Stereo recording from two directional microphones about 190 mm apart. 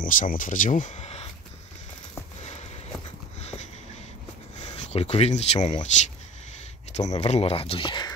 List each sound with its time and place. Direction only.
0.0 s speech: 45° left (ahead or behind)
3.3 s a sound: 35° left (ahead or behind)
4.6 s speech: 30° left (ahead or behind)
7.2 s speech: 35° left (ahead or behind)